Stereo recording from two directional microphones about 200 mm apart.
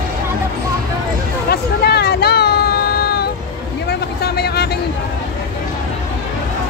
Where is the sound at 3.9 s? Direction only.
55° left (ahead or behind).